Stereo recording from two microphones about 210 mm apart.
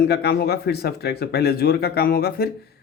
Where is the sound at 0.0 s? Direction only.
50° left (ahead or behind).